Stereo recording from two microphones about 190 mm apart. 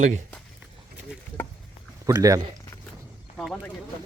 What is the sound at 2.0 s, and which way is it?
Speech, 20° right (ahead or behind).